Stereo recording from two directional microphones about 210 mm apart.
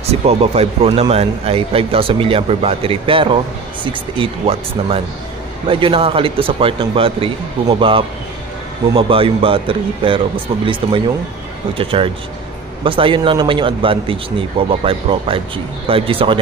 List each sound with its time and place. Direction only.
0.1 s a man's voice: 30° right (ahead or behind)